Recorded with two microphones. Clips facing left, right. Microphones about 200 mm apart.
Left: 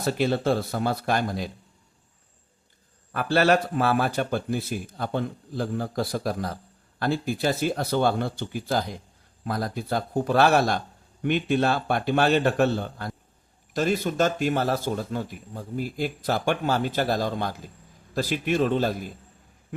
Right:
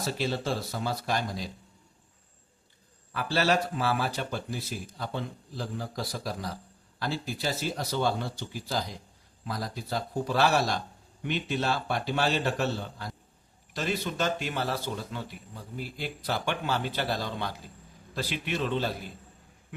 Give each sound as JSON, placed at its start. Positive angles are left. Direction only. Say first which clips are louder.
{"t": 0.0, "sound": "speech", "louder": "left 7 dB", "side_deg": 55}
{"t": 3.1, "sound": "speech", "louder": "left 6 dB", "side_deg": 55}